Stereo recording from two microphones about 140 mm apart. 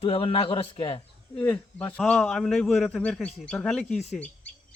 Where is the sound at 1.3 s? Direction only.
10° left (ahead or behind).